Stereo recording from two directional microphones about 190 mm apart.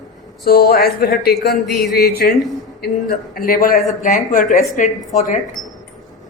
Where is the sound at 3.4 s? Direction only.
50° left (ahead or behind).